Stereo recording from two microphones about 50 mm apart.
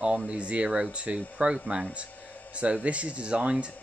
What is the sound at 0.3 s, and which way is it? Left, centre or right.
Speech, right.